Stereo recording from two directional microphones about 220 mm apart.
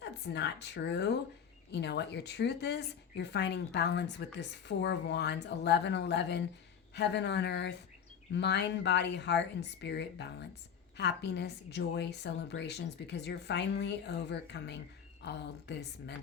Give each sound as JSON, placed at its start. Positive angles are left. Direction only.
{"t": 0.0, "sound": "a woman's voice", "side_deg": 50}